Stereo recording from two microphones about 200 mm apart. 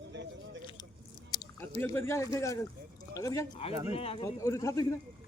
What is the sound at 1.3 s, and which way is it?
A man's voice, 15° left (ahead or behind).